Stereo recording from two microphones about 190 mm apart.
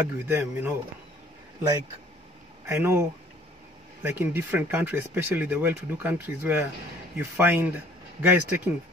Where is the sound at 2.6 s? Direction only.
15° right (ahead or behind).